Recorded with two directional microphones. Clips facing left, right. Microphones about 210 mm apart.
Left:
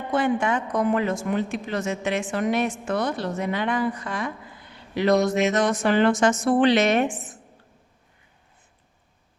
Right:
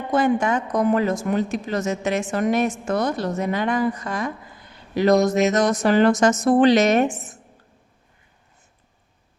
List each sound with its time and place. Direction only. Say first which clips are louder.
0.1 s speech: right 3 dB; 40° right (ahead or behind)